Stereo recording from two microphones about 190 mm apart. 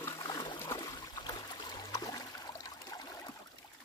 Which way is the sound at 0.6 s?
25° left (ahead or behind).